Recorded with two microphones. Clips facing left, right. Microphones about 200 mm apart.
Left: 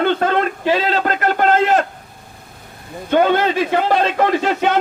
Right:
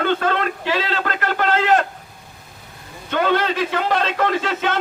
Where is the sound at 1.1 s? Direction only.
50° left (ahead or behind).